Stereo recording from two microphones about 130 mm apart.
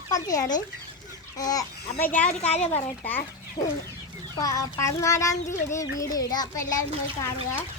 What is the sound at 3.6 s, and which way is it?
Chicken, 45° left (ahead or behind).